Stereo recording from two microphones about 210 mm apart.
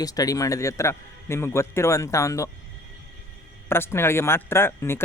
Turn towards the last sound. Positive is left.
turn(degrees=10)  # may be behind; listen again after turning